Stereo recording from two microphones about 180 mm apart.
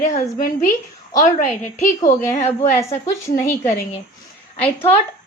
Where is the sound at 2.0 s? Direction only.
20° left (ahead or behind).